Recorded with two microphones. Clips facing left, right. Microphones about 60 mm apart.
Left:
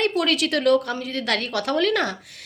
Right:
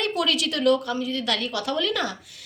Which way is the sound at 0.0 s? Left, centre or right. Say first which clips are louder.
Left 3 dB; left.